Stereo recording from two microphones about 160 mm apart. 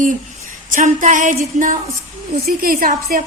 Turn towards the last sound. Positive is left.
turn(degrees=-65)  # may be behind; listen again after turning